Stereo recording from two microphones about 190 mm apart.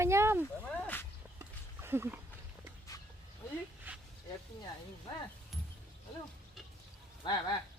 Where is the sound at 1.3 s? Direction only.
10° right (ahead or behind).